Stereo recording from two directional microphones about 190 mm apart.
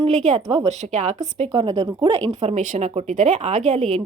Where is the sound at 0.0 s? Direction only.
35° right (ahead or behind).